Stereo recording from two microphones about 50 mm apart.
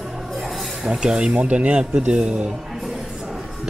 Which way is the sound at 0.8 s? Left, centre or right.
Centre.